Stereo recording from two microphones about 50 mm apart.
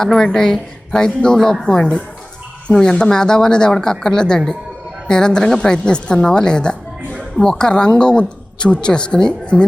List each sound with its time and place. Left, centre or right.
0.0 s speech: centre